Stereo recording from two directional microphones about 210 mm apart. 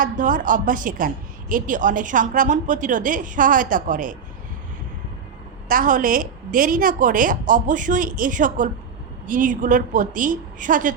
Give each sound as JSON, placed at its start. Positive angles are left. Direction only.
{"t": 0.0, "sound": "a woman's voice", "side_deg": -40}
{"t": 5.6, "sound": "a woman's voice", "side_deg": -40}